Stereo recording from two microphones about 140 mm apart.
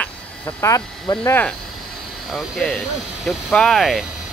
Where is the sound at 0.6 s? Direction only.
20° left (ahead or behind).